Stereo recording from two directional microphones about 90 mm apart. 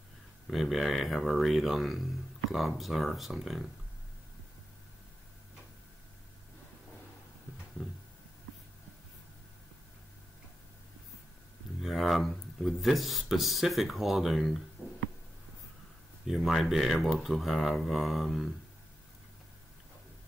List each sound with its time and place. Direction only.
0.5 s speech: centre (ahead or behind)
7.8 s a sound: 10° left (ahead or behind)
11.8 s speech: centre (ahead or behind)
14.8 s music: 25° left (ahead or behind)
16.3 s speech: centre (ahead or behind)